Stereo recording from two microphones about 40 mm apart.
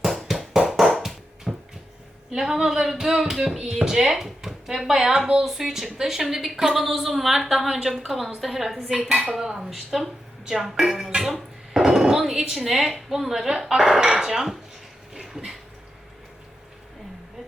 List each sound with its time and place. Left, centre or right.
0.0 s bouncing: centre
2.3 s a woman's voice: centre
9.0 s speech: centre
11.3 s dishes: centre
12.3 s speech: centre
13.6 s speech: centre
13.8 s speech: centre
15.1 s a sound: centre